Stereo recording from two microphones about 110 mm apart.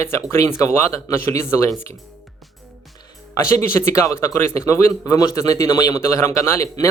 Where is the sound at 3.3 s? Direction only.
25° left (ahead or behind).